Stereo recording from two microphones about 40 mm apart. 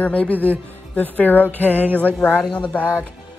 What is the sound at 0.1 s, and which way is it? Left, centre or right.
Speech, left.